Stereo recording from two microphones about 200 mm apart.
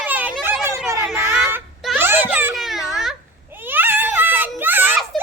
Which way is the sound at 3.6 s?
10° right (ahead or behind).